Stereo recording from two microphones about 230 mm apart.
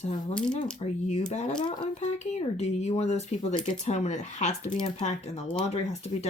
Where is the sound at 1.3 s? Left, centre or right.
Left.